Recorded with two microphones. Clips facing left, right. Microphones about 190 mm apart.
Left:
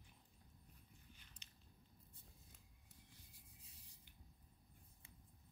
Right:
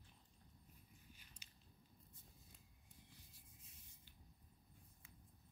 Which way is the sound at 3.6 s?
35° left (ahead or behind).